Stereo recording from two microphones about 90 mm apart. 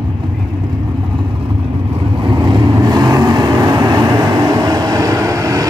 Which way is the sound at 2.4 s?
55° right (ahead or behind).